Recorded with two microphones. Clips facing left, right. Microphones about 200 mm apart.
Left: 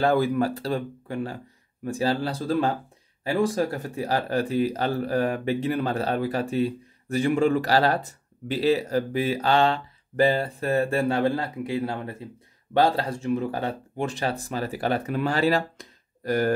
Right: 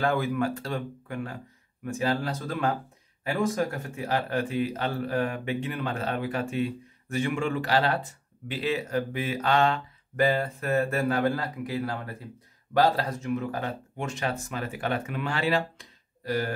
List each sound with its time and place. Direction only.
0.0 s speech: 35° left (ahead or behind)